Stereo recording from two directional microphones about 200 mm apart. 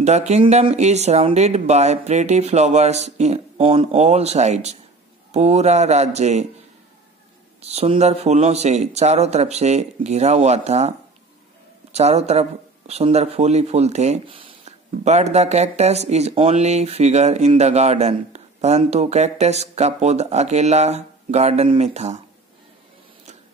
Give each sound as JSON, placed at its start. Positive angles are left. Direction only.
{"t": 0.0, "sound": "speech", "side_deg": -35}
{"t": 7.6, "sound": "speech", "side_deg": -30}
{"t": 11.9, "sound": "speech", "side_deg": -35}